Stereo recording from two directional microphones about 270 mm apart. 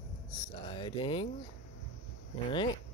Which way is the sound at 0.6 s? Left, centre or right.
Centre.